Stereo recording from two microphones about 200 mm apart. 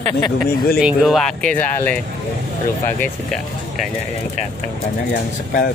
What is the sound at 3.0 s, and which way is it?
Speech, centre (ahead or behind).